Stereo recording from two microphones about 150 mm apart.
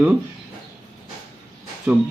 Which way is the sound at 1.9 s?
5° right (ahead or behind).